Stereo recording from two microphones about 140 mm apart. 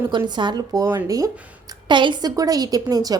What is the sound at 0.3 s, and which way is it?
A woman's voice, 30° right (ahead or behind).